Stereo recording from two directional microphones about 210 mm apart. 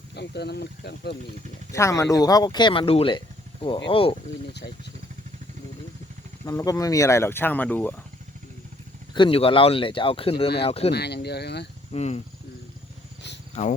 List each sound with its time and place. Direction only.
0.1 s speech: 55° left (ahead or behind)
1.7 s speech: 15° left (ahead or behind)
6.4 s speech: 15° left (ahead or behind)
9.1 s speech: 25° left (ahead or behind)
10.9 s speech: 50° left (ahead or behind)
11.9 s speech: 30° left (ahead or behind)